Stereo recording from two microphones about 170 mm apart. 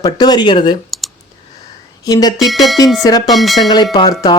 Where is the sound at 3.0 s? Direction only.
25° left (ahead or behind).